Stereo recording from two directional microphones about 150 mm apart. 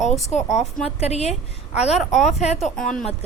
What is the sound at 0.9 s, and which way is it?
A woman's voice, 45° left (ahead or behind).